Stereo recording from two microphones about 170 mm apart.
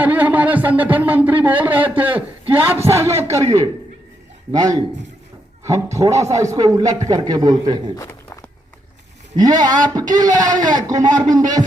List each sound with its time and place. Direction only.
0.0 s speech: 10° right (ahead or behind)
4.5 s a man's voice: 25° right (ahead or behind)
7.9 s a sound: 15° left (ahead or behind)
9.3 s a man's voice: 25° right (ahead or behind)